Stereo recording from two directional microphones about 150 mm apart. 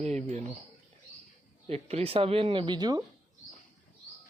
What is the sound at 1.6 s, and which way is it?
Speech, 40° right (ahead or behind).